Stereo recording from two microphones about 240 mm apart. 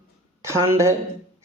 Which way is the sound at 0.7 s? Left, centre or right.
Centre.